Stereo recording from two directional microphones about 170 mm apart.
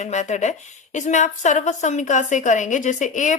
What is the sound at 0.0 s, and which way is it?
Speech, 45° left (ahead or behind).